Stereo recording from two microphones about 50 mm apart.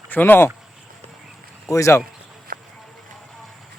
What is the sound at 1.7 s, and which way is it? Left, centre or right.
Speech, left.